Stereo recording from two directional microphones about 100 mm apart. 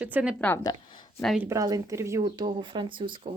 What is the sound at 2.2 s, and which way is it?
Speech, 50° right (ahead or behind).